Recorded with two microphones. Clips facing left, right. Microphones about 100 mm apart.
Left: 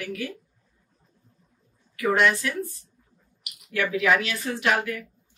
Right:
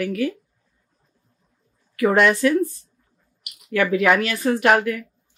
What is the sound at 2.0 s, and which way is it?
Speech, 55° right (ahead or behind).